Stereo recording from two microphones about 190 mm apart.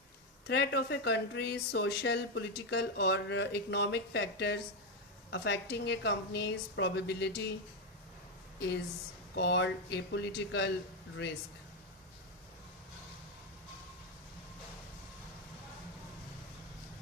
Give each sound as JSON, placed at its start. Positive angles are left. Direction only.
{"t": 0.4, "sound": "speech", "side_deg": 60}
{"t": 9.3, "sound": "speech", "side_deg": 65}